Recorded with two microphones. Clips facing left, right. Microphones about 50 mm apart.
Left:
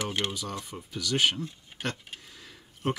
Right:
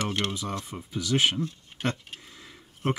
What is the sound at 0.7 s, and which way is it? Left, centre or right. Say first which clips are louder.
Speech: right 4 dB; right.